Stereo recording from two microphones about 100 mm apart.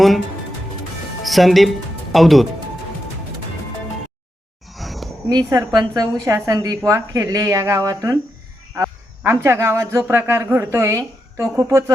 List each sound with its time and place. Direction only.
1.2 s speech: centre (ahead or behind)
4.7 s a sound: centre (ahead or behind)
5.5 s a woman's voice: 35° right (ahead or behind)